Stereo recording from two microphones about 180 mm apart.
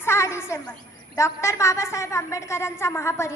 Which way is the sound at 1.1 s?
15° left (ahead or behind).